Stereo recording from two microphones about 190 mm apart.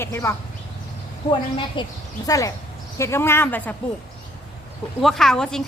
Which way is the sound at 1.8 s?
20° left (ahead or behind).